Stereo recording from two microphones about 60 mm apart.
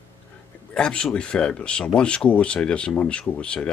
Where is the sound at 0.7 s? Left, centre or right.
Centre.